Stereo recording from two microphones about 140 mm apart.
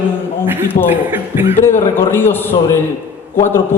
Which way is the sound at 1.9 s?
15° left (ahead or behind).